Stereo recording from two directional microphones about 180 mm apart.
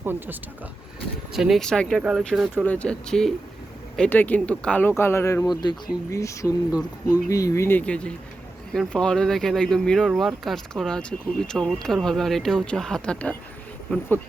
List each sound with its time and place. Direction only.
0.0 s speech: 10° right (ahead or behind)
1.3 s speech: centre (ahead or behind)